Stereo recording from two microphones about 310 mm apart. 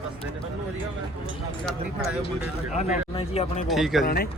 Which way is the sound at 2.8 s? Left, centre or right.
Centre.